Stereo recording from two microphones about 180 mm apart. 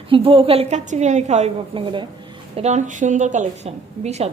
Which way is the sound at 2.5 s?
40° right (ahead or behind).